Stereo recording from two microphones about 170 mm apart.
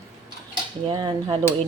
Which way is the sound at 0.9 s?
25° right (ahead or behind).